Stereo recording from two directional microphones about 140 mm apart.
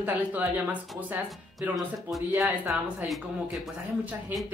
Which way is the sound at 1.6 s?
Centre (ahead or behind).